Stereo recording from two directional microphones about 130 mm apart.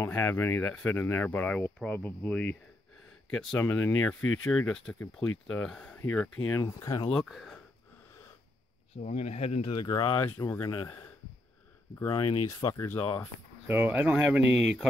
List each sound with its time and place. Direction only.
0.0 s speech: 20° left (ahead or behind)
3.5 s speech: 15° left (ahead or behind)
6.4 s speech: 25° left (ahead or behind)
7.1 s speech: 5° left (ahead or behind)
8.9 s speech: 55° left (ahead or behind)
9.7 s speech: 35° left (ahead or behind)
12.1 s speech: 40° left (ahead or behind)
12.4 s speech: 25° left (ahead or behind)
13.7 s speech: 15° right (ahead or behind)